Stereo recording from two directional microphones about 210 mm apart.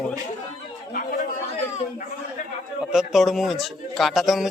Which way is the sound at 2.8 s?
Centre (ahead or behind).